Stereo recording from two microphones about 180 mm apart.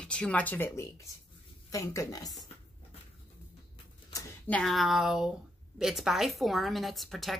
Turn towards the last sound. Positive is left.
turn(degrees=0)  # may be behind; listen again after turning